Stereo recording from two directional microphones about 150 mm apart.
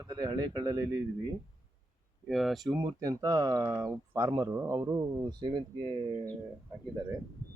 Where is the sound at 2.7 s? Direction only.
25° right (ahead or behind).